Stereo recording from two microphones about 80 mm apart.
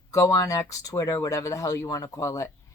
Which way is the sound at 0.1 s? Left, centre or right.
Left.